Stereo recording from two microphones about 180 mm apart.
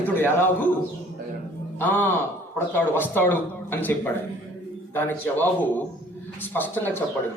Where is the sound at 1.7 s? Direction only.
10° left (ahead or behind).